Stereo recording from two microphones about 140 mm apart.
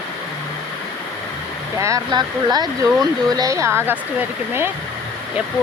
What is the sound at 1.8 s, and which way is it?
Speech, 25° right (ahead or behind).